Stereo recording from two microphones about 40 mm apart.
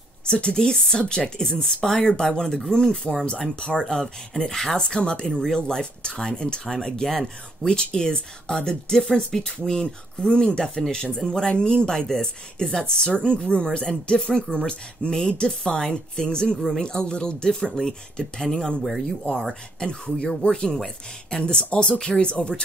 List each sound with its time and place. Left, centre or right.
0.3 s speech: left
16.5 s speech: centre
16.8 s speech: left
18.8 s speech: centre
19.8 s speech: left